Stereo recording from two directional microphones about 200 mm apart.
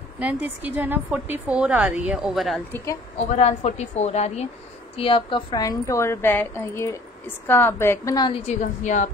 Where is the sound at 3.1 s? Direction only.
35° left (ahead or behind).